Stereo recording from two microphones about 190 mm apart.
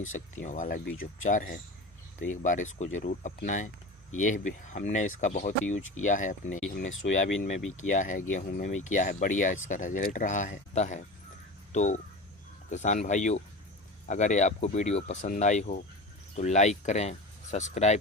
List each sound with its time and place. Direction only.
0.3 s speech: 40° left (ahead or behind)
7.5 s speech: 90° left
7.9 s speech: 40° left (ahead or behind)